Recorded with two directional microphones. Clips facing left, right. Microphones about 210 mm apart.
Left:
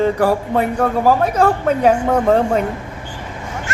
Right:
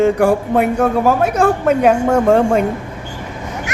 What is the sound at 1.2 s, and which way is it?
Speech, 80° right.